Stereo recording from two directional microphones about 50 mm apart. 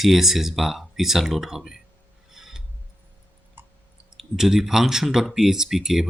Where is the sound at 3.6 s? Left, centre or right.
Right.